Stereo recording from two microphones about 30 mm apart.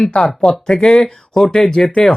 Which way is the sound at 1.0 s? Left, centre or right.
Centre.